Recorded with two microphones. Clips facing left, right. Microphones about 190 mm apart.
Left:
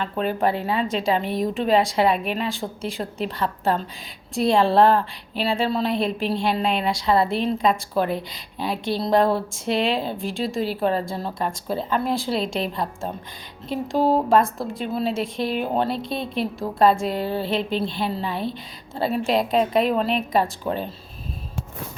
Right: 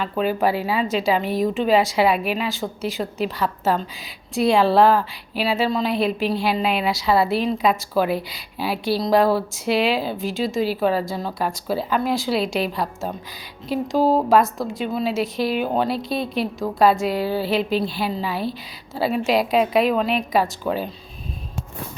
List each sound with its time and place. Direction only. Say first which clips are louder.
0.0 s a woman's voice: right 2 dB; 5° right (ahead or behind)